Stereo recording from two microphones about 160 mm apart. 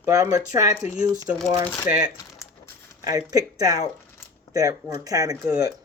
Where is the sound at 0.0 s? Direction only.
20° right (ahead or behind).